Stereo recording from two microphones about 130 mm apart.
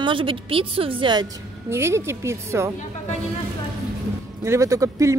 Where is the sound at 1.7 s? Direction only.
20° right (ahead or behind).